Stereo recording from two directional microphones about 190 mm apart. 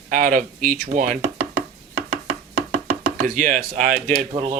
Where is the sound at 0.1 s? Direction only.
45° right (ahead or behind).